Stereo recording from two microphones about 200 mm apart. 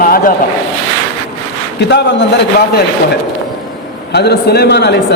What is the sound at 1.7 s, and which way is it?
Speech, 60° left (ahead or behind).